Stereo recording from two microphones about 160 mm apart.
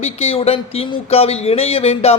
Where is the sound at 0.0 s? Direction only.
40° left (ahead or behind).